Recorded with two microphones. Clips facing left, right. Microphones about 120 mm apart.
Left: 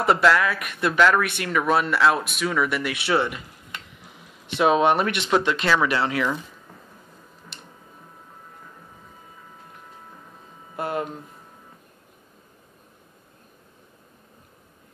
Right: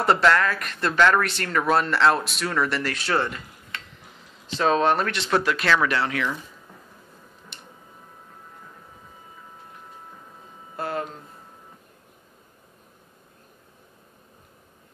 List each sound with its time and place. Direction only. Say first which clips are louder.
0.0 s speech: left 1 dB; centre (ahead or behind)
5.4 s speech: left 1 dB; centre (ahead or behind)
5.7 s speech: even; 10° left (ahead or behind)
10.8 s a sound: left 2 dB; 15° left (ahead or behind)